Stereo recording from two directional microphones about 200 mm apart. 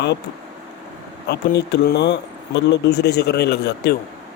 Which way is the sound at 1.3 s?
55° left (ahead or behind).